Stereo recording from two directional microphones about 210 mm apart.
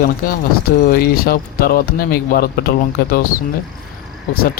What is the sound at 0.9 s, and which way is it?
Speech, 45° left (ahead or behind).